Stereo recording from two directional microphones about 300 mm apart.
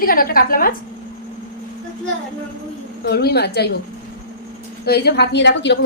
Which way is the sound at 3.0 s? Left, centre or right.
Left.